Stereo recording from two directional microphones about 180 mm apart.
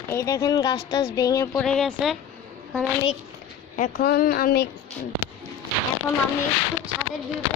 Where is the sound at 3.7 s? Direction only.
45° left (ahead or behind).